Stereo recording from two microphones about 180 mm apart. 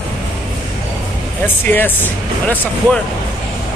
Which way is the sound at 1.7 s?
10° left (ahead or behind).